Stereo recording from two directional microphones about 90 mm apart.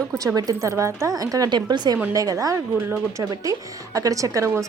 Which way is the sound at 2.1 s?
40° right (ahead or behind).